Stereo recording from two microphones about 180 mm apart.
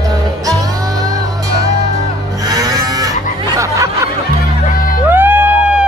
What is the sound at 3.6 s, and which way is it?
Snicker, 15° right (ahead or behind).